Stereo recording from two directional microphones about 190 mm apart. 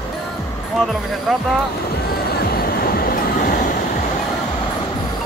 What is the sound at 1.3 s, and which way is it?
Speech, centre (ahead or behind).